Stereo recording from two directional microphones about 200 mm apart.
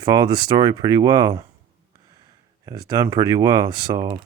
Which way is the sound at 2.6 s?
20° right (ahead or behind).